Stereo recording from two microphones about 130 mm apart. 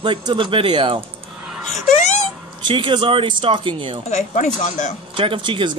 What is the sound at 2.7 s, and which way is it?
Speech, 40° right (ahead or behind).